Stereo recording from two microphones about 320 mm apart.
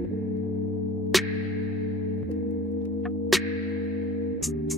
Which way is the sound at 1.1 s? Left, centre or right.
Centre.